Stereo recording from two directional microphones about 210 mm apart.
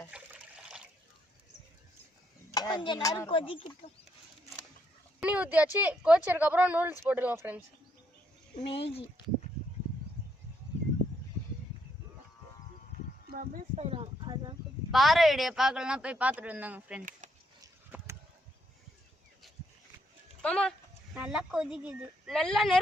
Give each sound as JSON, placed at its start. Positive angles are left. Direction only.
{"t": 0.1, "sound": "water", "side_deg": -5}
{"t": 2.5, "sound": "speech", "side_deg": 20}
{"t": 5.2, "sound": "speech", "side_deg": -5}
{"t": 8.5, "sound": "speech", "side_deg": 25}
{"t": 13.3, "sound": "speech", "side_deg": -45}
{"t": 13.7, "sound": "a sound", "side_deg": -30}
{"t": 14.9, "sound": "speech", "side_deg": 0}
{"t": 17.2, "sound": "a sound", "side_deg": -35}
{"t": 17.6, "sound": "a sound", "side_deg": -10}
{"t": 20.4, "sound": "speech", "side_deg": 5}